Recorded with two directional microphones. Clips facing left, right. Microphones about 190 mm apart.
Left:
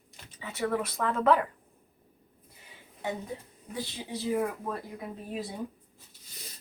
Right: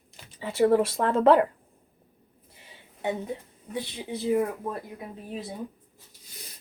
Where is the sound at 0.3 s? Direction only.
30° right (ahead or behind).